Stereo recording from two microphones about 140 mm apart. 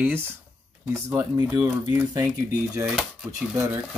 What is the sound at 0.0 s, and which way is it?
Speech, 15° right (ahead or behind).